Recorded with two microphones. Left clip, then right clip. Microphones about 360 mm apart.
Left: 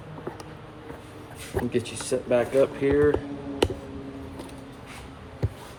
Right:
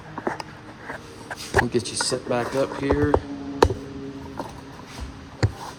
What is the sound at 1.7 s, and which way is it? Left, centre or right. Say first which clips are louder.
Speech: right 3 dB; right.